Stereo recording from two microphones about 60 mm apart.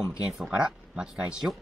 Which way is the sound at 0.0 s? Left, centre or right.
Centre.